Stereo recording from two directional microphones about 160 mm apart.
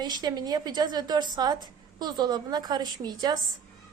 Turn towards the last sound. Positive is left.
turn(degrees=-25)  # may be behind; listen again after turning